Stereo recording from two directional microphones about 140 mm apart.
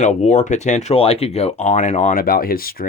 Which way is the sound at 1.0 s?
45° left (ahead or behind).